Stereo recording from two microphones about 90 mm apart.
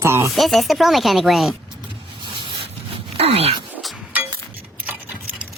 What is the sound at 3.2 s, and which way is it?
Speech, 90° right.